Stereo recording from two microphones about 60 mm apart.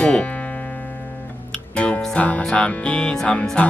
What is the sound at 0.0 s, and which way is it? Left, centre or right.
Music, left.